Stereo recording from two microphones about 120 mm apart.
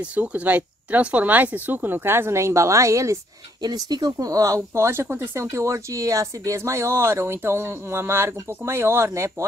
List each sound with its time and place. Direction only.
0.0 s speech: 10° right (ahead or behind)